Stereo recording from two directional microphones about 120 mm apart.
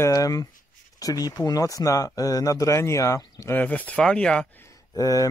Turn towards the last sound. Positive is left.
turn(degrees=30)  # may be behind; listen again after turning